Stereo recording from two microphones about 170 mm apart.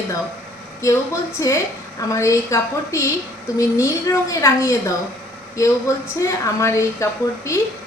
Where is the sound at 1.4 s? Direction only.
20° left (ahead or behind).